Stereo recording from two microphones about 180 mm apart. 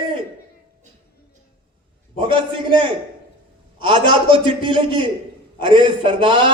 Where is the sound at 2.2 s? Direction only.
25° right (ahead or behind).